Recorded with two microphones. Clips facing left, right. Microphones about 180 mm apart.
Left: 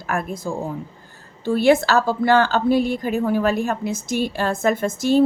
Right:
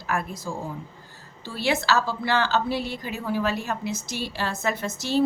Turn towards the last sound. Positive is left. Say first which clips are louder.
# left 7 dB
turn(degrees=50)  # may be behind; listen again after turning